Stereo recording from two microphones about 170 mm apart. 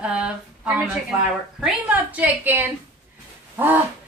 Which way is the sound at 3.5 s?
10° right (ahead or behind).